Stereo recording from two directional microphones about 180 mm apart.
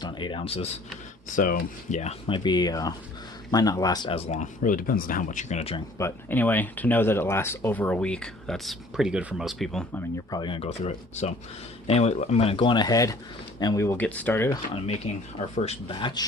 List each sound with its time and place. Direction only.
0.0 s speech: 25° left (ahead or behind)
1.4 s speech: 50° left (ahead or behind); by 4.2 s 25° left (ahead or behind)
4.3 s speech: 45° left (ahead or behind)
6.0 s speech: 10° left (ahead or behind)
10.3 s speech: 25° left (ahead or behind); by 14.5 s 10° left (ahead or behind)
14.5 s speech: 30° left (ahead or behind)